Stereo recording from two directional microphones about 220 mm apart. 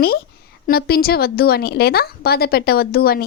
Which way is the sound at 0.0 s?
45° left (ahead or behind).